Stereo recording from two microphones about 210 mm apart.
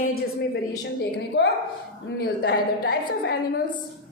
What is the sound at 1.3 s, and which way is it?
A woman's voice, 55° left (ahead or behind).